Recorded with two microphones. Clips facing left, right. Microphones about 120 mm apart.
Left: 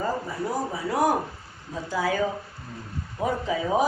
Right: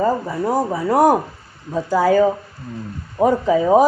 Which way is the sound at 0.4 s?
55° right (ahead or behind).